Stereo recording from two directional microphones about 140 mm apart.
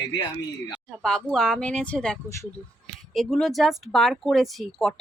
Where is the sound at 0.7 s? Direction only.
5° left (ahead or behind).